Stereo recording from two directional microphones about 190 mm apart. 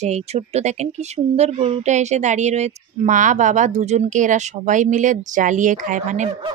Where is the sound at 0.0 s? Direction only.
35° right (ahead or behind).